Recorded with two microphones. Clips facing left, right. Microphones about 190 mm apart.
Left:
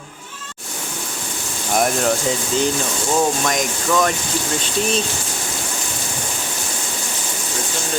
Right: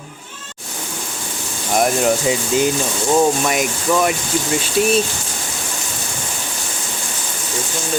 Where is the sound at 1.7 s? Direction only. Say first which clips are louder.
Right 2 dB; 5° right (ahead or behind).